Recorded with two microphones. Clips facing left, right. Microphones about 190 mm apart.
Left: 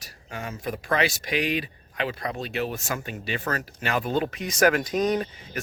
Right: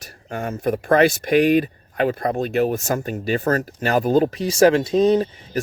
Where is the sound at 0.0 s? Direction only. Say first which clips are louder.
Right 8 dB; 50° right (ahead or behind).